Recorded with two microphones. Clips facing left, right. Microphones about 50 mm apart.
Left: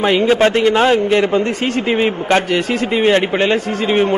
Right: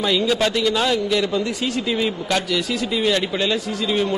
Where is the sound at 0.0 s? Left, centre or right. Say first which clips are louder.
Left 7 dB; left.